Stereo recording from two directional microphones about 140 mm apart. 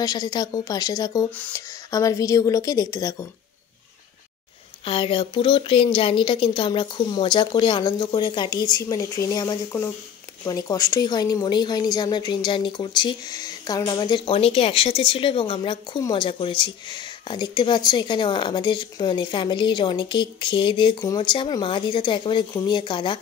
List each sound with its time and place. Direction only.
0.0 s a woman's voice: 30° left (ahead or behind)
4.8 s speech: 40° left (ahead or behind)